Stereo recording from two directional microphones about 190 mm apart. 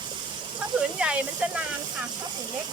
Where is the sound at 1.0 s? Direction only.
5° right (ahead or behind).